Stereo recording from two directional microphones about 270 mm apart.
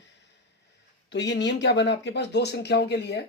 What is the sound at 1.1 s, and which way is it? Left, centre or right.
Speech, left.